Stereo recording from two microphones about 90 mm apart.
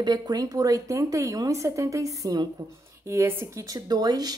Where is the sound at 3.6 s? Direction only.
40° right (ahead or behind).